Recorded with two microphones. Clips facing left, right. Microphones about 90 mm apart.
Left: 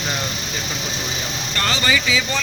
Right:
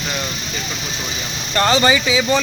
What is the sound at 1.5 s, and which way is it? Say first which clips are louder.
Speech: right 7 dB; 30° right (ahead or behind).